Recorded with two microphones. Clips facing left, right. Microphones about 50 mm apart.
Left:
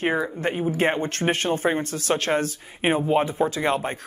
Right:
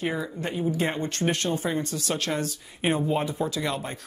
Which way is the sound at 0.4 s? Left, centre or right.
Left.